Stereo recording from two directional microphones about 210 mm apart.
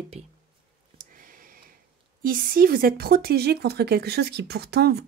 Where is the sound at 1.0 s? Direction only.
40° right (ahead or behind).